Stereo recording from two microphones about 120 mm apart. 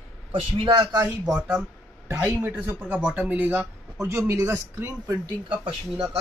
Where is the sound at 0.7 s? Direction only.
30° right (ahead or behind).